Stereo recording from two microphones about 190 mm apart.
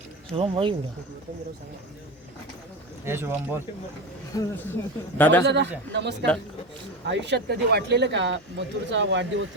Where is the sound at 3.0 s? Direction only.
10° right (ahead or behind).